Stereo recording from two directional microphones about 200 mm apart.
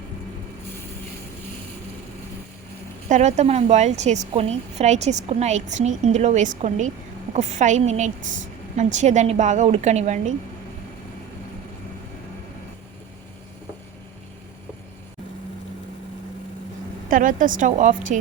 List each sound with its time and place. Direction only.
3.1 s a woman's voice: 35° right (ahead or behind)
17.1 s a woman's voice: 40° right (ahead or behind)